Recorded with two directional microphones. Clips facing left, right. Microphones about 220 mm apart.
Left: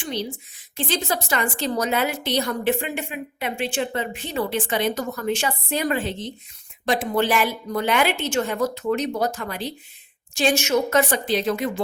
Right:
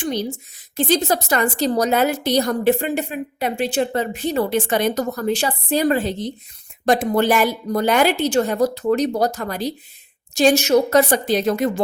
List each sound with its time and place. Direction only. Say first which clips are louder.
0.0 s a woman's voice: right 5 dB; 45° right (ahead or behind)